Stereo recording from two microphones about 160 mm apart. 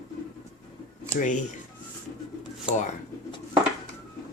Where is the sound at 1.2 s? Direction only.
50° left (ahead or behind).